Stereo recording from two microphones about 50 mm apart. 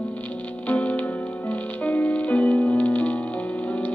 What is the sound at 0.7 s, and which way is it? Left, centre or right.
Music, left.